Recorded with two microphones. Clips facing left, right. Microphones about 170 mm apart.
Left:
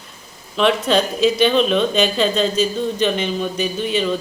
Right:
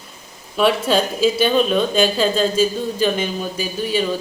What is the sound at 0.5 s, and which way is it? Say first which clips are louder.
Speech: even; 5° right (ahead or behind).